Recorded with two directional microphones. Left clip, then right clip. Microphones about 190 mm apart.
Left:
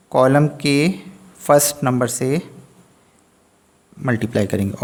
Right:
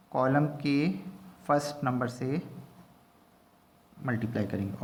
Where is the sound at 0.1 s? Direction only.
55° left (ahead or behind).